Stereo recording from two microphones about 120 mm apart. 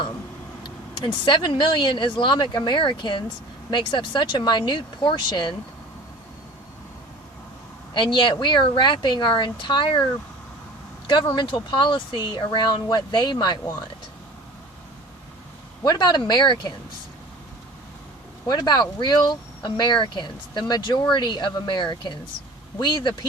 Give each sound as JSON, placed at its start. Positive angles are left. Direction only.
{"t": 0.6, "sound": "speech", "side_deg": 40}
{"t": 8.1, "sound": "speech", "side_deg": 40}
{"t": 11.0, "sound": "speech", "side_deg": 45}
{"t": 15.8, "sound": "speech", "side_deg": 35}
{"t": 18.4, "sound": "speech", "side_deg": 35}